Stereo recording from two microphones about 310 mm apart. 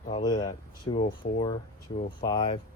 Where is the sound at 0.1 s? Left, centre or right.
Centre.